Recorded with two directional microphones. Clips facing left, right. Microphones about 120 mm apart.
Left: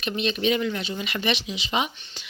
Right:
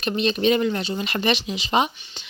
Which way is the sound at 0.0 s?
40° right (ahead or behind).